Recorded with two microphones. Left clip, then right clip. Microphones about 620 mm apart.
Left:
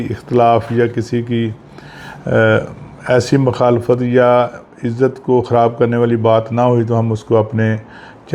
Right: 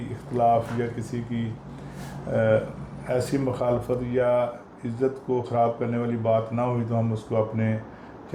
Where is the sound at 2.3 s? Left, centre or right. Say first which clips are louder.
Left 9 dB; left.